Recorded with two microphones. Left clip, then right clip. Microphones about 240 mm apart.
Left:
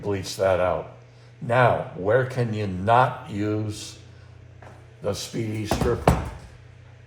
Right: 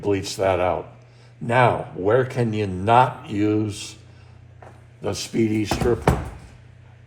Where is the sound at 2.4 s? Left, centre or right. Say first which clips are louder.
Right 4 dB; right.